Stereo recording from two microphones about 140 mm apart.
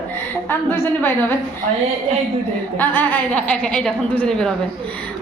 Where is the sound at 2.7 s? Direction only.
15° left (ahead or behind).